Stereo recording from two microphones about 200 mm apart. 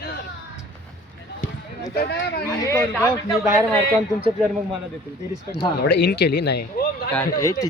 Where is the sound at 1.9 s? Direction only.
55° left (ahead or behind).